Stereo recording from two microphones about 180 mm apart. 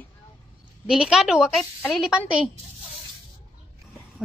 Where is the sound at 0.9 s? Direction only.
5° right (ahead or behind).